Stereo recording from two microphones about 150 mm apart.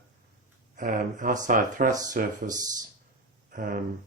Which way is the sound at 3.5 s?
65° right (ahead or behind).